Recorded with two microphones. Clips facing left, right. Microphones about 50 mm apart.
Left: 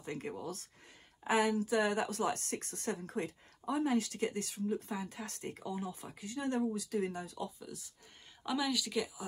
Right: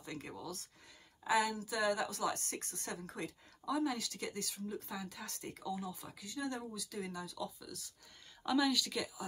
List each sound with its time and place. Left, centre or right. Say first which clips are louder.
0.0 s speech: left 5 dB; left
8.5 s a woman's voice: right 2 dB; centre